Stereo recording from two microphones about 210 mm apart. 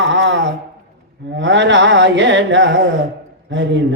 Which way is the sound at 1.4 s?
60° right (ahead or behind).